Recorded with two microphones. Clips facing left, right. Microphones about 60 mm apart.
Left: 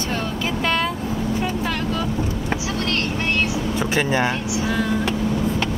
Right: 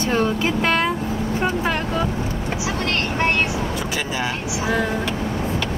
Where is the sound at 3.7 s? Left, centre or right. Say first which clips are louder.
Left 4 dB; left.